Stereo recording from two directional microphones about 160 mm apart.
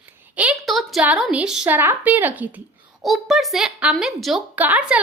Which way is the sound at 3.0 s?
Centre (ahead or behind).